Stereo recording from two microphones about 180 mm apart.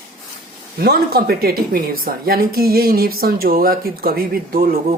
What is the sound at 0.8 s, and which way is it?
Speech, 60° right (ahead or behind).